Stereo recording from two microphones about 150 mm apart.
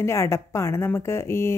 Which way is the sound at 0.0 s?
20° left (ahead or behind).